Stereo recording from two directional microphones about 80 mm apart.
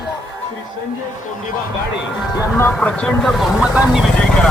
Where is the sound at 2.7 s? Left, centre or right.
Centre.